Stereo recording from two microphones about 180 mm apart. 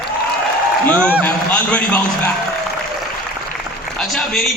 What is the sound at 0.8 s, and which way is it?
A man's voice, 10° left (ahead or behind).